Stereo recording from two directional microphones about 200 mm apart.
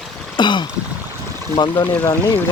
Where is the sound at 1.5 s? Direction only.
25° left (ahead or behind).